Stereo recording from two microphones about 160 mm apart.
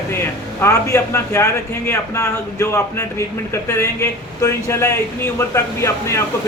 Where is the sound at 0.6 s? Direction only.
15° left (ahead or behind).